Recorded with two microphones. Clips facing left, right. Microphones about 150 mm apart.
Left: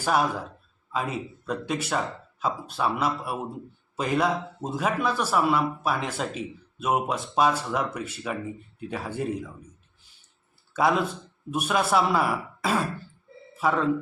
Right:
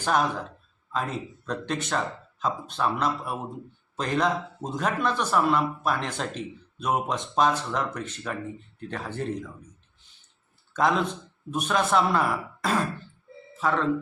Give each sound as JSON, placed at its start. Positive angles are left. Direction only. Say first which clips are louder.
{"t": 0.0, "sound": "speech", "louder": "even", "side_deg": 5}
{"t": 10.8, "sound": "speech", "louder": "left 1 dB", "side_deg": 5}